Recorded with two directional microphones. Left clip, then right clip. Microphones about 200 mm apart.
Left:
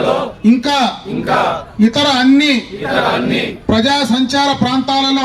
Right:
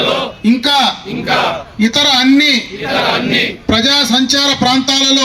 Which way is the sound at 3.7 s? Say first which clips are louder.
Right 2 dB; 35° left (ahead or behind).